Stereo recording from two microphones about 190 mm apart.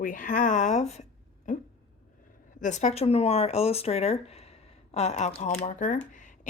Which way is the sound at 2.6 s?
40° left (ahead or behind).